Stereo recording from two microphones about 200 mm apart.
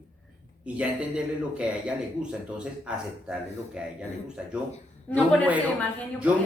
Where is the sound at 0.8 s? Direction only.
5° right (ahead or behind).